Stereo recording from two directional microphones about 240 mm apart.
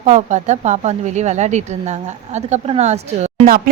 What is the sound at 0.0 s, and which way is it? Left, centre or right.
A woman's voice, right.